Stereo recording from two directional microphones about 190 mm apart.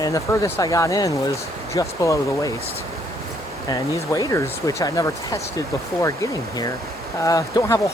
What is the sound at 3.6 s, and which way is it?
Speech, 20° left (ahead or behind).